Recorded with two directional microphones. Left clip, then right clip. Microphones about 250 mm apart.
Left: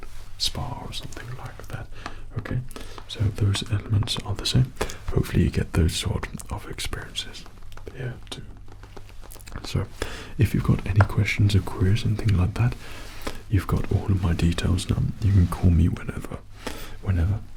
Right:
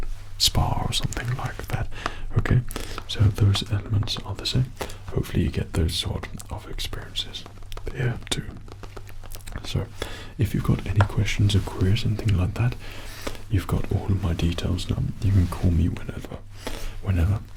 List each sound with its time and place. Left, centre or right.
0.3 s speech: right
0.8 s whispering: right
3.7 s speech: centre
3.9 s speech: left
7.0 s speech: centre
8.0 s speech: right
10.0 s speech: left
17.1 s speech: centre